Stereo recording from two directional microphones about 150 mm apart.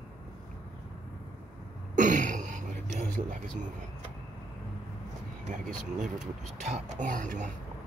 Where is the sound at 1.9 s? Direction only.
55° right (ahead or behind).